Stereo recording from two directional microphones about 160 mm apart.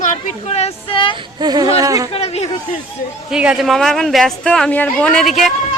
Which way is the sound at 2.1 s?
40° left (ahead or behind).